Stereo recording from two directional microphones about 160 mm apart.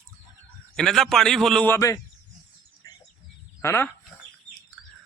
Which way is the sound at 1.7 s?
20° left (ahead or behind).